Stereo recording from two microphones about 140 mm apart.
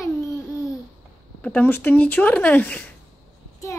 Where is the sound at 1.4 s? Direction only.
10° left (ahead or behind).